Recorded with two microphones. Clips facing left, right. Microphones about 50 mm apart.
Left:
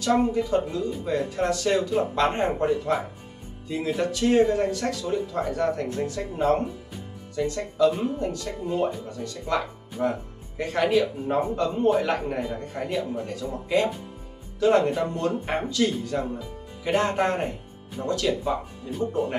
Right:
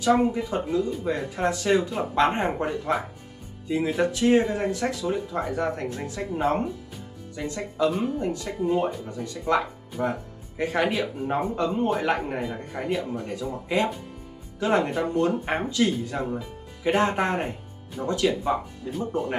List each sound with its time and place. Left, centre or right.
0.0 s speech: centre
18.9 s speech: centre